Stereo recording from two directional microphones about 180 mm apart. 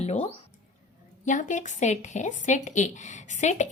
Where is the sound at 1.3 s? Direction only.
45° left (ahead or behind).